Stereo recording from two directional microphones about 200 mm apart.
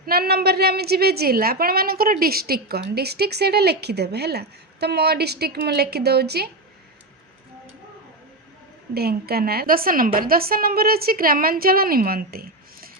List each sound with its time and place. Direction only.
0.0 s a woman's voice: 50° right (ahead or behind)
9.0 s a woman's voice: 50° right (ahead or behind)